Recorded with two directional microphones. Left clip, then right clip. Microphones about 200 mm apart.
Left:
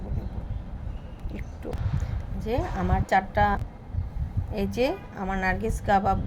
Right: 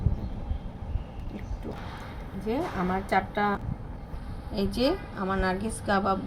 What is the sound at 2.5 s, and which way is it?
A woman's voice, 60° left (ahead or behind).